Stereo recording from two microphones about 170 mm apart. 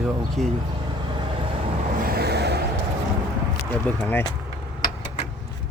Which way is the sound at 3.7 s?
10° left (ahead or behind).